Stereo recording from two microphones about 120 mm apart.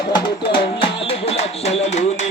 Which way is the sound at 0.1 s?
45° left (ahead or behind).